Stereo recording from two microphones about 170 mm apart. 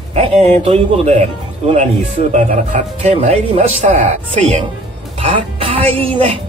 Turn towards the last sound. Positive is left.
turn(degrees=-30)  # may be behind; listen again after turning